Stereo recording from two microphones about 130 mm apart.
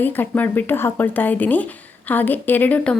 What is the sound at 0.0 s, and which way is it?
A woman's voice, 15° left (ahead or behind).